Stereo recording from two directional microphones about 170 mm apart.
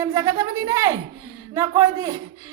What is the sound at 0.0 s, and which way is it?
A woman's voice, 20° right (ahead or behind).